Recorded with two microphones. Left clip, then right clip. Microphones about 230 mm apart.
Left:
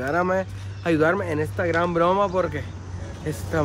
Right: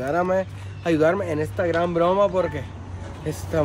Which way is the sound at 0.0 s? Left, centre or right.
Centre.